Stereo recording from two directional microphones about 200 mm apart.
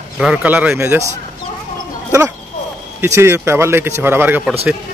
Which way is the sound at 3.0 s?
15° right (ahead or behind).